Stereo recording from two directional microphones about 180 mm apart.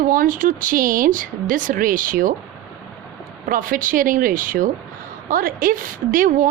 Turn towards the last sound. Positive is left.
turn(degrees=-50)  # may be behind; listen again after turning